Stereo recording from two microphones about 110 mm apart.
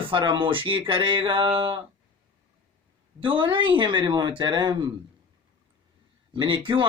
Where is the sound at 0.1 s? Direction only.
50° right (ahead or behind).